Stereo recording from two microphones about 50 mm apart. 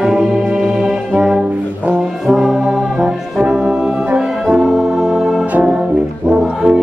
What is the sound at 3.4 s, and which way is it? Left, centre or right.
Music, centre.